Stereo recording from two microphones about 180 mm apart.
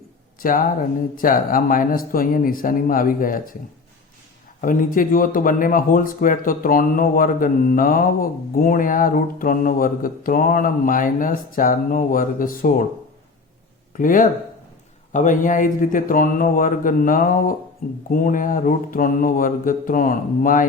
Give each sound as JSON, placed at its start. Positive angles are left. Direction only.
{"t": 0.4, "sound": "speech", "side_deg": 50}
{"t": 4.6, "sound": "speech", "side_deg": 50}
{"t": 13.9, "sound": "speech", "side_deg": 50}